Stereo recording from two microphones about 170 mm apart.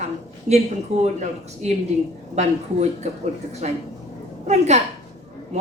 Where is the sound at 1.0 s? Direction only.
40° right (ahead or behind).